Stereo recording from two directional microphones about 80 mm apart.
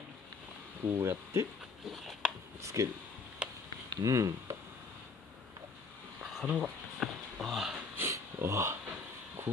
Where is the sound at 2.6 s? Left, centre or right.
Right.